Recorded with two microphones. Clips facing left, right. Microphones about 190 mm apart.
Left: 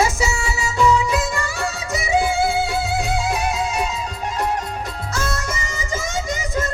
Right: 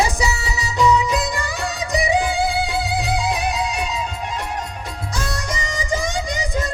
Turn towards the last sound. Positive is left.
turn(degrees=-15)  # may be behind; listen again after turning